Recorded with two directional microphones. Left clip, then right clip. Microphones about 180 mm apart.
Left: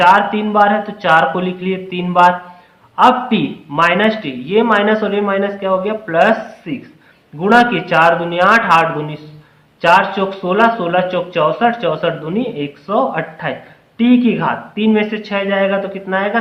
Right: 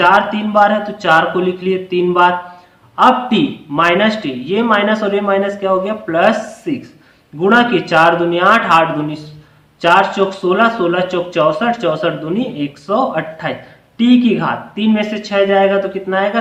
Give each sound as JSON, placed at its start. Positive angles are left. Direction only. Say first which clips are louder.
{"t": 0.0, "sound": "a man's voice", "louder": "left 1 dB", "side_deg": 25}
{"t": 9.8, "sound": "speech", "louder": "even", "side_deg": 25}